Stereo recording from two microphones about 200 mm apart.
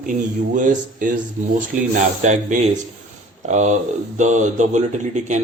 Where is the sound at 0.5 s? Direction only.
40° right (ahead or behind).